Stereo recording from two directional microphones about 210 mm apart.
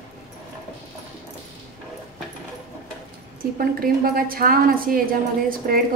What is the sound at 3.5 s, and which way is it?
A woman's voice, 45° right (ahead or behind).